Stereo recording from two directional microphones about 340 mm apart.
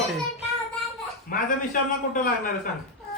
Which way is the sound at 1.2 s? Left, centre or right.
Left.